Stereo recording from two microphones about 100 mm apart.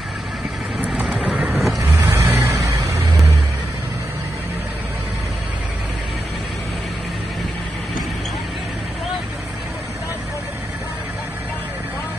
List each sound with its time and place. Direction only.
0.8 s vehicle: 10° right (ahead or behind); by 3.0 s 30° right (ahead or behind)